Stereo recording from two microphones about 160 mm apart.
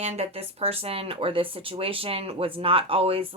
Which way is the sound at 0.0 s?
40° right (ahead or behind).